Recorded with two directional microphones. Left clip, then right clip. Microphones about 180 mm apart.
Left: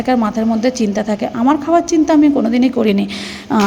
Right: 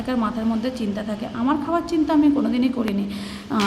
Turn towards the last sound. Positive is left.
turn(degrees=35)  # may be behind; listen again after turning